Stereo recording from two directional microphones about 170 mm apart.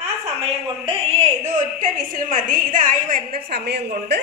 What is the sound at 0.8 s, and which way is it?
A woman's voice, 40° right (ahead or behind).